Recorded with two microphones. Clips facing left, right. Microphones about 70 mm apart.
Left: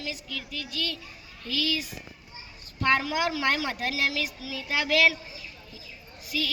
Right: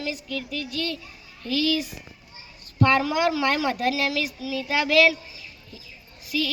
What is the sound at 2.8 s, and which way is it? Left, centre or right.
A woman's voice, right.